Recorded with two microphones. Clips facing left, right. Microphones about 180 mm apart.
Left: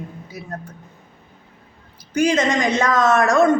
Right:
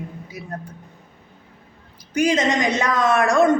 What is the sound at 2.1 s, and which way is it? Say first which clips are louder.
A woman's voice: left 1 dB; 20° right (ahead or behind).